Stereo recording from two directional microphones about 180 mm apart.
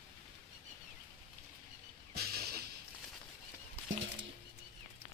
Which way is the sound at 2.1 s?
60° right (ahead or behind).